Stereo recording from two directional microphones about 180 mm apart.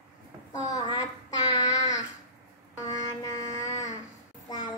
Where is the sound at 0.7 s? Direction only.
20° left (ahead or behind).